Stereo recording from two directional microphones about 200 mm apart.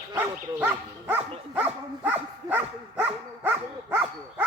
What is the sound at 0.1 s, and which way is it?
Speech, 10° right (ahead or behind).